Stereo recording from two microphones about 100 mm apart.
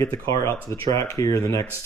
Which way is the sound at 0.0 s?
30° left (ahead or behind).